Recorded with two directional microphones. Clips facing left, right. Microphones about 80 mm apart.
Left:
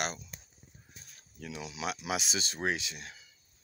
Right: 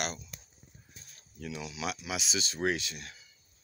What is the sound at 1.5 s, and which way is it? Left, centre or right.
Speech, left.